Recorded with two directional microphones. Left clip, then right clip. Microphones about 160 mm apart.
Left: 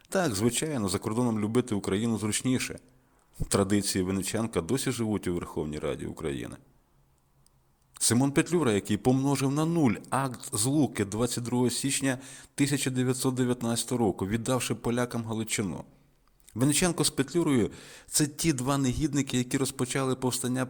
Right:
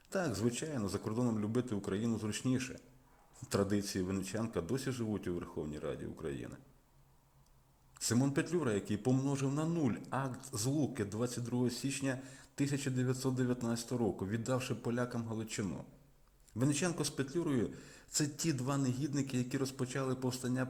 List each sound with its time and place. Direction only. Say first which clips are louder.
0.1 s speech: left 9 dB; 30° left (ahead or behind)
8.0 s speech: left 8 dB; 30° left (ahead or behind); by 10.1 s 45° left (ahead or behind)
10.1 s speech: left 9 dB; 25° left (ahead or behind)